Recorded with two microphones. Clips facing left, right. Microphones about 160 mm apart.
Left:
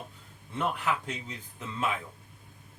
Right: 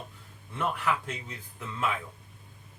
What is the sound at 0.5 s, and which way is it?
A man's voice, 20° left (ahead or behind).